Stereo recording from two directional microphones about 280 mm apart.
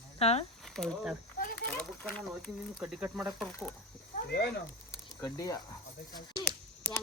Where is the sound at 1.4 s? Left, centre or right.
Left.